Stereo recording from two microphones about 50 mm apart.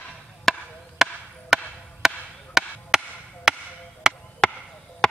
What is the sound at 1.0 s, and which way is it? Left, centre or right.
Chop, centre.